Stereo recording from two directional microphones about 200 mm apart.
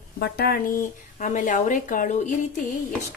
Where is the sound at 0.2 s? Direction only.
50° left (ahead or behind).